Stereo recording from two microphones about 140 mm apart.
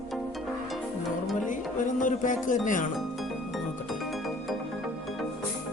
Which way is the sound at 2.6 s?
70° left (ahead or behind).